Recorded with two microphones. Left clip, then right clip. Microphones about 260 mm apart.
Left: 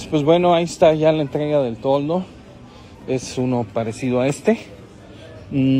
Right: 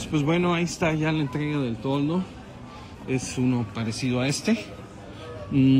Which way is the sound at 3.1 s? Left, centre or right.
Centre.